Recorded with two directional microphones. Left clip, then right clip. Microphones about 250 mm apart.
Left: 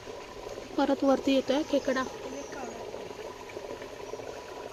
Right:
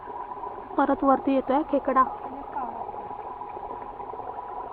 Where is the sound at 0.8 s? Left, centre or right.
Centre.